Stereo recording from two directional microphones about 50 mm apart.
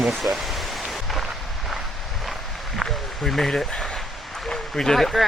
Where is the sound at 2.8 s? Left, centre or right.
Centre.